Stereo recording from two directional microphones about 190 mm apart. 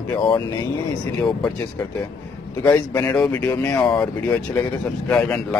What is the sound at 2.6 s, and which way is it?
Speech, 15° left (ahead or behind).